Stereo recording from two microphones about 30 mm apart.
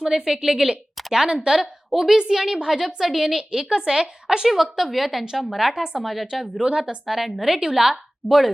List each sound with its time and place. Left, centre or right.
0.0 s a woman's voice: centre
1.9 s a woman's voice: centre
2.1 s a woman's voice: centre
3.5 s speech: right
4.4 s speech: centre
5.7 s speech: right
6.1 s a woman's voice: centre